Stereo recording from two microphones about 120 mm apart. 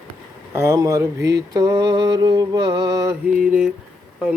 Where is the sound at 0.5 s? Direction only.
25° right (ahead or behind).